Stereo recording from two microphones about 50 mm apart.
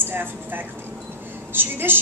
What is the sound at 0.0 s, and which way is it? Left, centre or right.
A woman's voice, right.